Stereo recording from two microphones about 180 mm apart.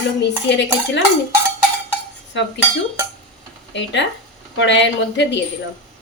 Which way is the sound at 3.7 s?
80° left.